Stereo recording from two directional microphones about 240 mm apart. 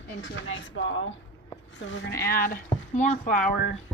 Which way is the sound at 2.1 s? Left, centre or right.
Left.